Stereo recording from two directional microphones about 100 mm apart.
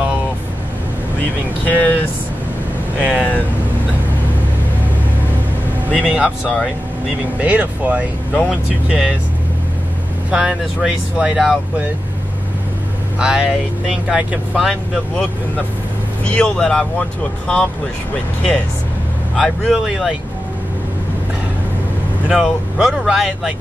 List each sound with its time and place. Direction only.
1.7 s speech: 15° left (ahead or behind)
3.0 s speech: 5° right (ahead or behind)
5.9 s speech: 10° right (ahead or behind)
10.3 s speech: 5° right (ahead or behind)
13.2 s speech: 10° right (ahead or behind); by 16.8 s 10° left (ahead or behind)
19.3 s speech: centre (ahead or behind)
22.3 s speech: 5° right (ahead or behind)